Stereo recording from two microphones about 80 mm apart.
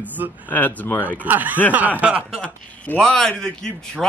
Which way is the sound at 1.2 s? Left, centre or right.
Right.